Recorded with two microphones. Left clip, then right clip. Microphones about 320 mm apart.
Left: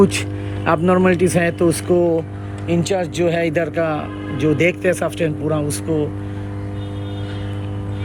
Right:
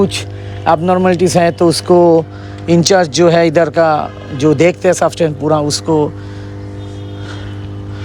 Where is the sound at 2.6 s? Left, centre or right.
Centre.